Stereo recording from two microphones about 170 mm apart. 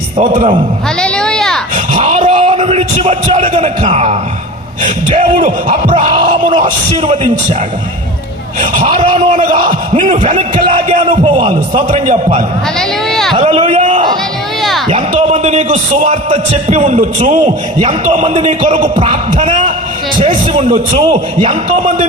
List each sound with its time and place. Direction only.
0.2 s a man's voice: 45° right (ahead or behind)
1.0 s a sound: 5° left (ahead or behind)
2.0 s a man's voice: 40° right (ahead or behind)
6.1 s a man's voice: 30° right (ahead or behind)
8.8 s a man's voice: 35° right (ahead or behind)
13.1 s speech: centre (ahead or behind)
13.4 s a sound: 40° right (ahead or behind)
14.8 s a man's voice: 40° right (ahead or behind)
17.7 s a man's voice: 35° right (ahead or behind)